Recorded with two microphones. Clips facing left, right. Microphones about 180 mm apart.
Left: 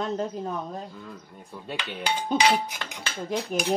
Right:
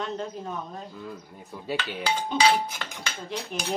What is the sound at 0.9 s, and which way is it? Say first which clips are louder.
Speech: right 3 dB; 5° right (ahead or behind).